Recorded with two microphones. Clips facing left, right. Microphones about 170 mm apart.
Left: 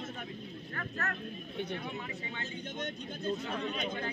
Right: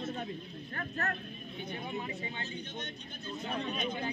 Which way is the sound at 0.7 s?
30° right (ahead or behind).